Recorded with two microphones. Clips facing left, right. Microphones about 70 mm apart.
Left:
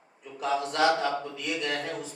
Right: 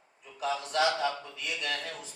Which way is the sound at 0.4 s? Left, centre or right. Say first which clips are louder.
Left 4 dB; left.